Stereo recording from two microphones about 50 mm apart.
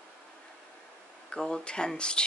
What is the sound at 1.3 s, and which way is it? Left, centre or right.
Speech, centre.